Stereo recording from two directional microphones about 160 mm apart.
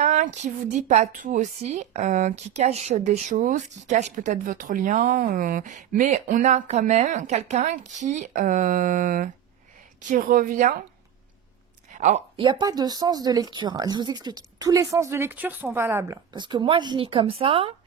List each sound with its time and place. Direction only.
0.0 s a woman's voice: 50° right (ahead or behind)
11.9 s a sound: 50° right (ahead or behind)
12.4 s a woman's voice: 30° right (ahead or behind)
16.3 s a woman's voice: 30° right (ahead or behind)